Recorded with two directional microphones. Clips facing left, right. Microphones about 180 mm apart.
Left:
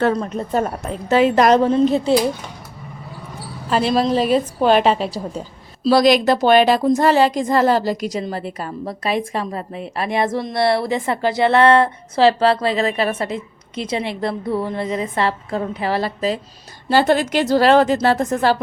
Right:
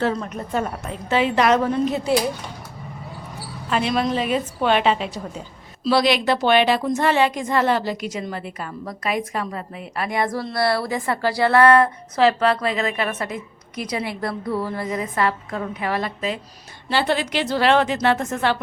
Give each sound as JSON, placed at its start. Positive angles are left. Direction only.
{"t": 0.2, "sound": "a woman's voice", "side_deg": 35}
{"t": 1.6, "sound": "speech", "side_deg": 30}
{"t": 3.7, "sound": "a woman's voice", "side_deg": 35}
{"t": 16.9, "sound": "a woman's voice", "side_deg": 45}